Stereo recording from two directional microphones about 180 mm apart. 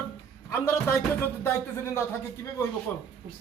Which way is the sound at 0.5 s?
10° left (ahead or behind).